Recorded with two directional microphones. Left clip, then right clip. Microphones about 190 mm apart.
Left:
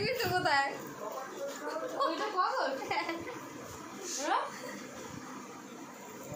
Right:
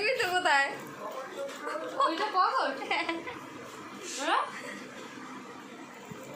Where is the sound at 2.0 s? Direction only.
15° right (ahead or behind).